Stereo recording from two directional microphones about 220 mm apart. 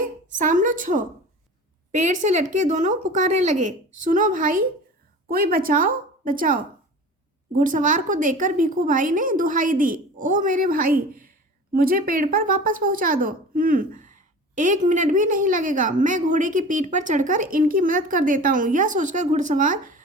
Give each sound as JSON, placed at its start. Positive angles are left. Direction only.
{"t": 0.3, "sound": "speech", "side_deg": -35}